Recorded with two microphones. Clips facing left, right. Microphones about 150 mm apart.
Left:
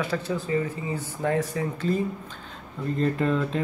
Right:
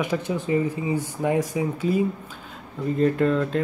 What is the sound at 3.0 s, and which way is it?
Speech, centre (ahead or behind).